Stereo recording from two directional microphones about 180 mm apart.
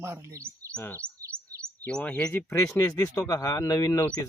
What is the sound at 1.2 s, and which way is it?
Chirp, 15° right (ahead or behind).